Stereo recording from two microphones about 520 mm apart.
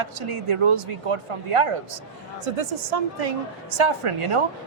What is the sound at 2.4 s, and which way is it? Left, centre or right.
Speech, right.